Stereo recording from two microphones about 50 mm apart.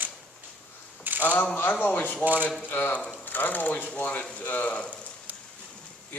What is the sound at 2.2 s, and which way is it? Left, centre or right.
Speech, right.